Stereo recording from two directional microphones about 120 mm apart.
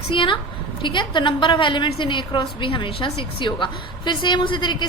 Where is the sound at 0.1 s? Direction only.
45° left (ahead or behind).